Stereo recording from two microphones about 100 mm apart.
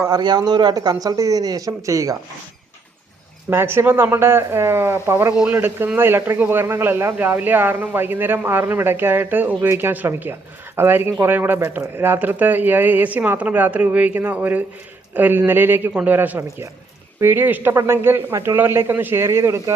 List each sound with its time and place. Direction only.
0.1 s speech: 45° right (ahead or behind)
3.5 s speech: 25° right (ahead or behind)
15.9 s speech: 10° right (ahead or behind); by 19.7 s 30° right (ahead or behind)